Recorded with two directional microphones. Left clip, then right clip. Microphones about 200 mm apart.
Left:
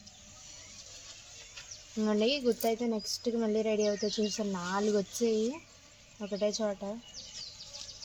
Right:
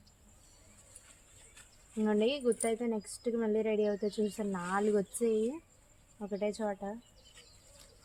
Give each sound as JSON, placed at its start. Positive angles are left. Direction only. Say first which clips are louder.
{"t": 2.0, "sound": "speech", "louder": "left 1 dB", "side_deg": -20}